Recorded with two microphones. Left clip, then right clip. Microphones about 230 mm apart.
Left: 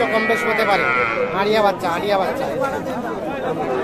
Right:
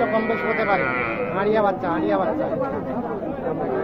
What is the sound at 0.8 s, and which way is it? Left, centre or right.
Speech, right.